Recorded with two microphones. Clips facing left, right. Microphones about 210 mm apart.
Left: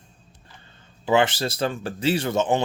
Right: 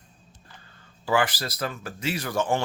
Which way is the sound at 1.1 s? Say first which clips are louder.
Left 4 dB; 25° left (ahead or behind).